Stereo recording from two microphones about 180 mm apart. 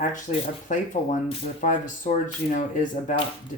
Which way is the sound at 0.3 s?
45° left (ahead or behind).